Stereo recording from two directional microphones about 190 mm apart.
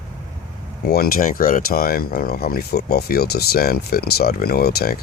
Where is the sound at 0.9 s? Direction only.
50° left (ahead or behind).